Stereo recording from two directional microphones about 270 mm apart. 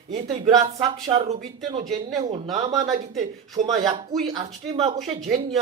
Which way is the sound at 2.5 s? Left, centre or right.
Centre.